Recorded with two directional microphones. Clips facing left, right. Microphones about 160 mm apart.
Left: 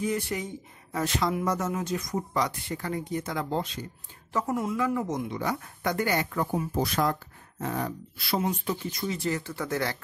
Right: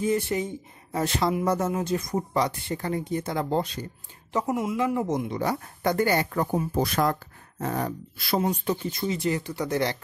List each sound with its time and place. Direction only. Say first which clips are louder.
0.0 s speech: right 4 dB; 25° right (ahead or behind)
4.3 s speech: right 2 dB; 15° right (ahead or behind); by 6.6 s 40° right (ahead or behind)
6.8 s speech: right 2 dB; 50° right (ahead or behind)
8.9 s speech: right 3 dB; 20° right (ahead or behind)